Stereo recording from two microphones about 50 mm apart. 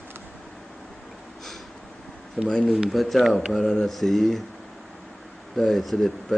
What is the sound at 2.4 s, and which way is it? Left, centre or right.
Speech, centre.